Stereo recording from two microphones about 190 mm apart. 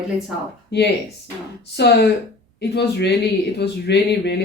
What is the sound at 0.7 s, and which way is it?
Speech, 60° left (ahead or behind).